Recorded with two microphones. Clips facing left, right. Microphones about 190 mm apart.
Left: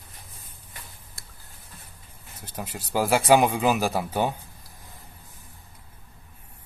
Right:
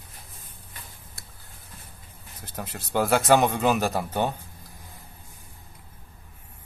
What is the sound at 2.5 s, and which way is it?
Speech, 5° left (ahead or behind).